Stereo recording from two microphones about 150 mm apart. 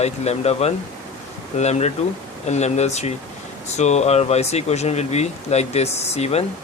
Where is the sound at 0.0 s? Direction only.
45° left (ahead or behind).